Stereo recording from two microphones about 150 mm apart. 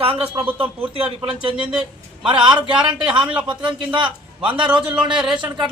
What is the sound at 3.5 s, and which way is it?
A man's voice, 30° right (ahead or behind).